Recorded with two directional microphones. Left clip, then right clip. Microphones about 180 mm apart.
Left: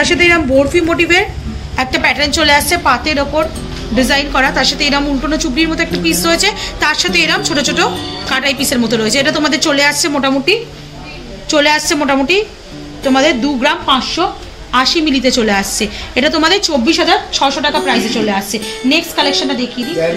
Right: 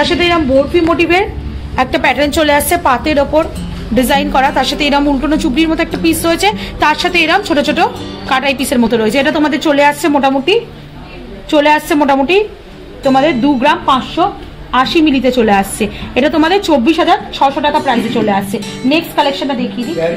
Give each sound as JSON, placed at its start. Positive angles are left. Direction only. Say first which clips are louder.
{"t": 0.0, "sound": "a woman's voice", "louder": "left 1 dB", "side_deg": -40}